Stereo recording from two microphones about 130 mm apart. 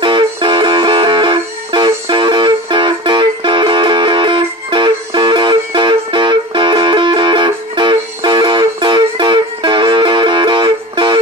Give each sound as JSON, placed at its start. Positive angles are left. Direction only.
{"t": 0.0, "sound": "music", "side_deg": -40}